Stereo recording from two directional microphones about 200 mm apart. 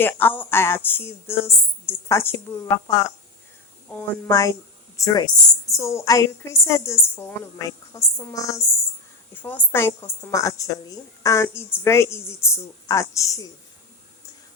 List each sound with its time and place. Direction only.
0.0 s a woman's voice: 10° left (ahead or behind)